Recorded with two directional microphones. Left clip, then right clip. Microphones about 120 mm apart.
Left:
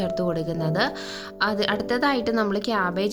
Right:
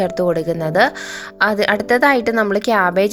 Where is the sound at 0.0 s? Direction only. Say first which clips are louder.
Right 8 dB; 50° right (ahead or behind).